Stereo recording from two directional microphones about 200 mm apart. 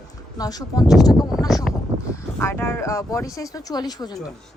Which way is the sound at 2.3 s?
10° left (ahead or behind).